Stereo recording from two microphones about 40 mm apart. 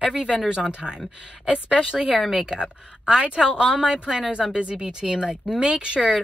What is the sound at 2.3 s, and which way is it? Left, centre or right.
Speech, centre.